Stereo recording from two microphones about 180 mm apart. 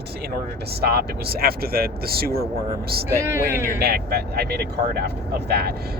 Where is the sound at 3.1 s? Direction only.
15° right (ahead or behind).